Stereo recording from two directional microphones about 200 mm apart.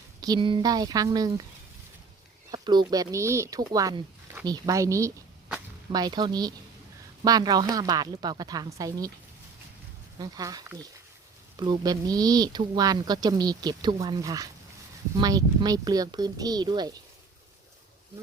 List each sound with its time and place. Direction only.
0.2 s speech: 20° right (ahead or behind)
2.5 s speech: 20° right (ahead or behind)
10.2 s speech: 20° right (ahead or behind)